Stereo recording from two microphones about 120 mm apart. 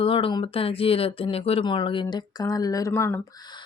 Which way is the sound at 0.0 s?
50° left (ahead or behind).